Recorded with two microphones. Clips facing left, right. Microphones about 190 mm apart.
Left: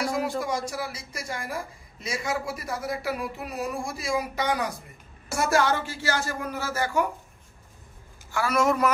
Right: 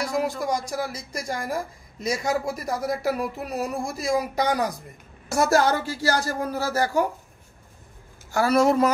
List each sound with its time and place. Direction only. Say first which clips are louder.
0.0 s speech: right 2 dB; 40° right (ahead or behind)
8.3 s speech: right 5 dB; 35° right (ahead or behind)